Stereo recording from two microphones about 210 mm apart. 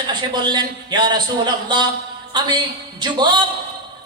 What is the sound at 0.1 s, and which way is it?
A man's voice, 20° right (ahead or behind).